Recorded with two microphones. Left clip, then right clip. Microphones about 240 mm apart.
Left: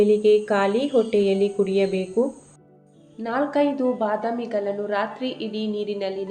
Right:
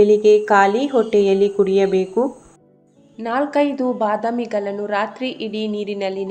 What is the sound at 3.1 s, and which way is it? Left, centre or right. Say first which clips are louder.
A woman's voice: right 4 dB; right.